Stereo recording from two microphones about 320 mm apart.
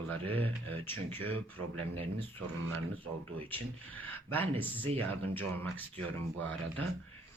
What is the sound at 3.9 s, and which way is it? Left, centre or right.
Speech, centre.